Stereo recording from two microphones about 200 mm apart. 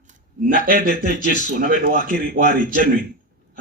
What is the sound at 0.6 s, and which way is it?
Speech, 45° right (ahead or behind).